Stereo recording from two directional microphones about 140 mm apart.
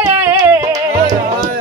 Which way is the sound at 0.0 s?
15° right (ahead or behind).